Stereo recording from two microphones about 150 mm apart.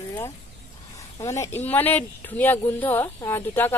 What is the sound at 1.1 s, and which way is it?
Speech, 20° left (ahead or behind).